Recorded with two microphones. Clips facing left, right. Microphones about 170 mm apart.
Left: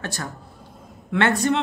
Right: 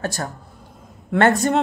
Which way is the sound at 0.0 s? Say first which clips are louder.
Right 5 dB; 45° right (ahead or behind).